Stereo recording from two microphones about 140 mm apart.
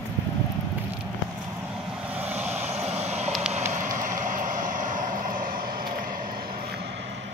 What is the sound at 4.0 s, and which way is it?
Vehicle, 65° right (ahead or behind).